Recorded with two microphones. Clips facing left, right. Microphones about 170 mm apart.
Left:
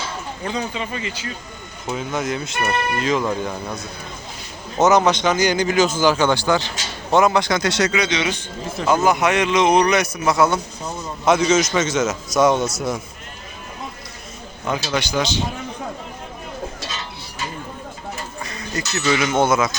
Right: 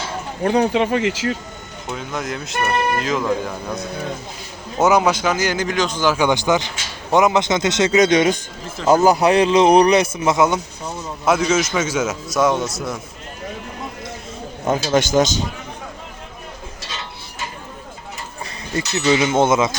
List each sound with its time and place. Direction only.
0.4 s speech: 65° right (ahead or behind); by 1.4 s 85° right
1.9 s a man's voice: centre (ahead or behind)
6.1 s speech: 15° right (ahead or behind)
7.9 s speech: 45° right (ahead or behind)
8.9 s speech: 35° right (ahead or behind); by 10.6 s 20° right (ahead or behind)
10.8 s a man's voice: centre (ahead or behind)
14.9 s speech: 45° right (ahead or behind)
18.7 s speech: 25° right (ahead or behind)